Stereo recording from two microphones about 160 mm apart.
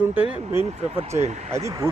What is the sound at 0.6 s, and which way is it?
Speech, 40° right (ahead or behind).